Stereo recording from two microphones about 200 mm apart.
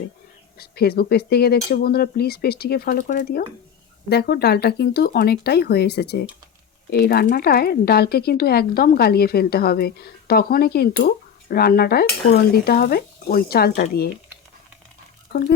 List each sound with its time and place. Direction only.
0.6 s speech: 50° left (ahead or behind)
15.3 s speech: 50° left (ahead or behind)